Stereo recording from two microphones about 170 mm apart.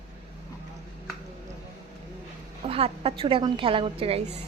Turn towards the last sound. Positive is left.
turn(degrees=-35)  # may be behind; listen again after turning